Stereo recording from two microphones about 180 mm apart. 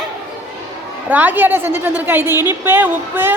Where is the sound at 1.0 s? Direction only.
10° right (ahead or behind).